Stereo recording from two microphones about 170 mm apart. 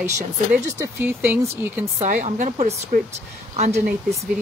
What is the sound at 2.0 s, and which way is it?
Speech, 55° right (ahead or behind).